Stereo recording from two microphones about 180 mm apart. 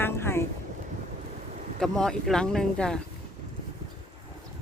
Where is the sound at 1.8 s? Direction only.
Centre (ahead or behind).